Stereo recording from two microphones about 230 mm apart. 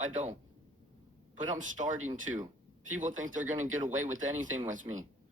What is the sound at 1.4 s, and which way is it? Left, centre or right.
Speech, right.